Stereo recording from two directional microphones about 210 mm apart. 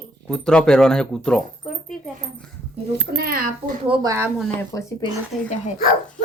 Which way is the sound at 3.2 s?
45° right (ahead or behind).